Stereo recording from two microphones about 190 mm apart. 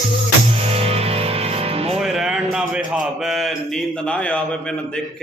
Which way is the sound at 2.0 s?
Centre (ahead or behind).